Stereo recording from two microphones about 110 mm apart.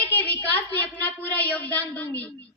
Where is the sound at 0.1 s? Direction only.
20° left (ahead or behind).